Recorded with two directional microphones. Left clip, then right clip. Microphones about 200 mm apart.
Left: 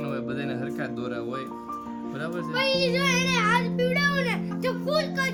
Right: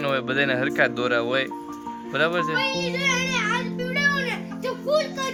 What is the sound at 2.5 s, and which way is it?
Music, 20° left (ahead or behind).